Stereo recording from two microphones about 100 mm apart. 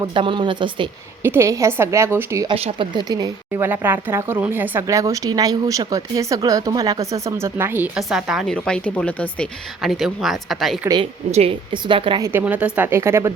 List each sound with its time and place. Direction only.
0.1 s speech: 60° right (ahead or behind)
1.2 s speech: 25° right (ahead or behind)
2.6 s a woman's voice: 90° right
2.9 s speech: 45° right (ahead or behind)
3.5 s speech: 20° right (ahead or behind)
4.9 s speech: 30° right (ahead or behind)
7.9 s speech: 5° right (ahead or behind)
8.4 s speech: 10° left (ahead or behind)
9.8 s speech: centre (ahead or behind)
11.3 s a woman's voice: 90° right
11.7 s speech: 55° right (ahead or behind)
12.2 s speech: 20° right (ahead or behind)